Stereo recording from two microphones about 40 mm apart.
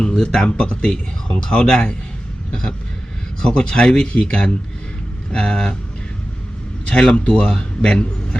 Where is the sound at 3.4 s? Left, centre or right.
Centre.